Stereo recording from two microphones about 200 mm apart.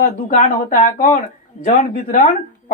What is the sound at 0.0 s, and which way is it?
A woman's voice, 40° left (ahead or behind).